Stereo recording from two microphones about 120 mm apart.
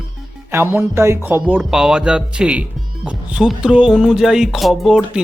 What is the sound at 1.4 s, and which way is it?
Speech, 10° right (ahead or behind).